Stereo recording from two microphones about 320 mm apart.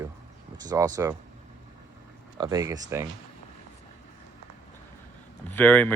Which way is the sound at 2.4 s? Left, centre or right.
Centre.